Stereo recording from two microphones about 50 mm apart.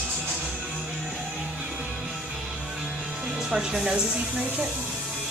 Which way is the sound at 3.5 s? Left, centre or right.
Centre.